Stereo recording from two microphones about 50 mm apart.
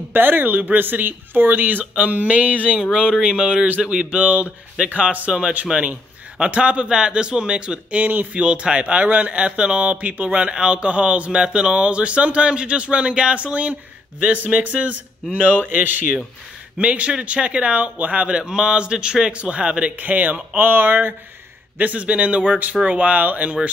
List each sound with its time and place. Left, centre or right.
0.1 s speech: right
2.8 s speech: centre
8.0 s speech: right
8.4 s speech: right
16.7 s speech: right
18.4 s speech: centre
20.0 s speech: right
21.7 s speech: right